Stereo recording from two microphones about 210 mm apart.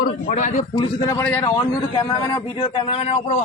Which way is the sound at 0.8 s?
15° left (ahead or behind).